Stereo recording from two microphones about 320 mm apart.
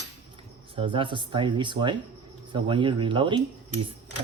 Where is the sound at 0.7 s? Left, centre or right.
Centre.